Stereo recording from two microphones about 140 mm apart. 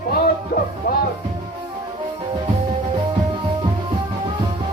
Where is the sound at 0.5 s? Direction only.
90° left.